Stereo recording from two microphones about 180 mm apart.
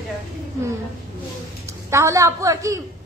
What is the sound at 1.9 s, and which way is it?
Speech, 15° right (ahead or behind).